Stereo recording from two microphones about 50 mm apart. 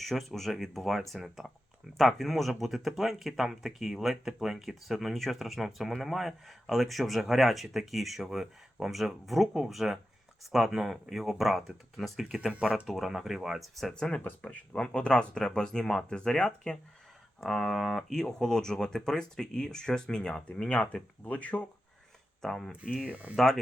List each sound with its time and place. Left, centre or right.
0.0 s speech: centre
13.9 s speech: centre
14.3 s speech: left
14.8 s speech: centre
17.4 s speech: centre; by 21.7 s left
22.4 s speech: centre
22.7 s speech: right